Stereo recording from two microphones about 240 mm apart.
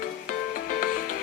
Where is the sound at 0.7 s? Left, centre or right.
Left.